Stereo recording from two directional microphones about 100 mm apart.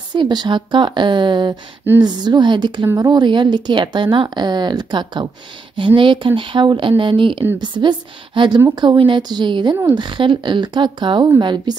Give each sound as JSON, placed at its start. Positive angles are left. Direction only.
{"t": 0.1, "sound": "speech", "side_deg": -45}